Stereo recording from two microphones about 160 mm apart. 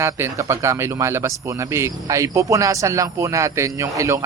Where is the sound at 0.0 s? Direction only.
15° right (ahead or behind).